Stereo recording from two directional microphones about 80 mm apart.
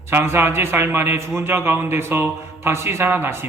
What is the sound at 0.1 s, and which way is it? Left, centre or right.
A man's voice, right.